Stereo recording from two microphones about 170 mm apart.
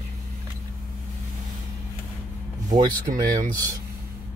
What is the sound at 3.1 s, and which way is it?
Speech, 55° right (ahead or behind).